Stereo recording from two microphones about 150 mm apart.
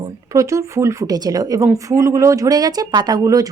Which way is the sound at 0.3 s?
20° right (ahead or behind).